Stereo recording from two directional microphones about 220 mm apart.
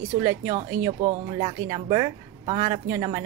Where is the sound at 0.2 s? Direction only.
15° right (ahead or behind).